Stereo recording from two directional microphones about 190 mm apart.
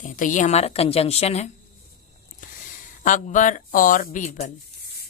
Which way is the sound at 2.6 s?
40° left (ahead or behind).